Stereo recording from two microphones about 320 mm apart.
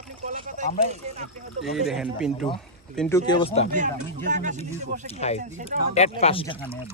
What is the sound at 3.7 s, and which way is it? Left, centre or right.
Speech, right.